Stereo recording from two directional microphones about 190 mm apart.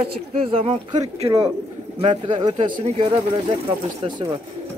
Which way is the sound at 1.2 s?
20° right (ahead or behind).